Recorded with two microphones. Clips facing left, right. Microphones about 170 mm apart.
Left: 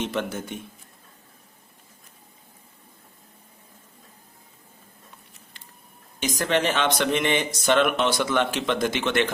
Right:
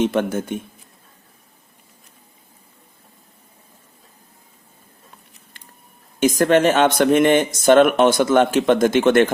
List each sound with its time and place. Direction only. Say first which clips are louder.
0.0 s speech: right 9 dB; 50° right (ahead or behind)
6.1 s speech: right 9 dB; 50° right (ahead or behind)